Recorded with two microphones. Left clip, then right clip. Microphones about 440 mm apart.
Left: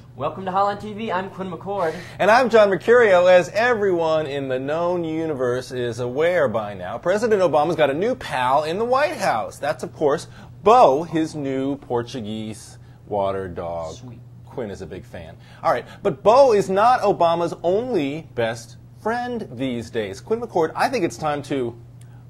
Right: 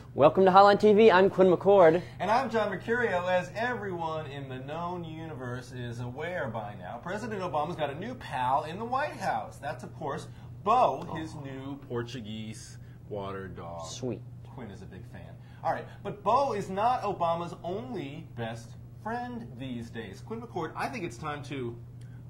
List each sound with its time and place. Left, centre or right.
0.2 s speech: right
2.1 s speech: centre
11.9 s speech: left
14.7 s speech: centre
20.2 s speech: left
20.7 s speech: centre